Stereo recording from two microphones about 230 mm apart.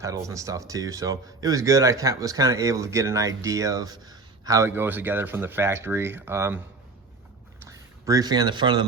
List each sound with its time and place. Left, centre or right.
0.0 s speech: centre
7.6 s speech: centre